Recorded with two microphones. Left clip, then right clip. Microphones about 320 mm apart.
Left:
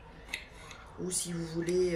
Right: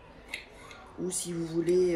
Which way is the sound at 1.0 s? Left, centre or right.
Centre.